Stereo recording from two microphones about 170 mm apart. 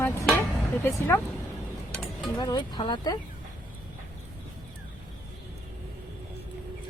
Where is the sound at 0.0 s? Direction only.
15° left (ahead or behind).